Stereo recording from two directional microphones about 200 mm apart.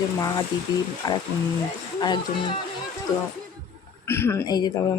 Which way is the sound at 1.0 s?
20° left (ahead or behind).